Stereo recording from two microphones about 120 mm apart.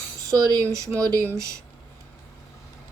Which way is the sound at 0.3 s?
30° right (ahead or behind).